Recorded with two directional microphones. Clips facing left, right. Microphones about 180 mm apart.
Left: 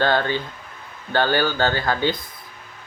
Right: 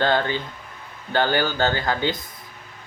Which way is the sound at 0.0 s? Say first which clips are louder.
Left 1 dB; 15° right (ahead or behind).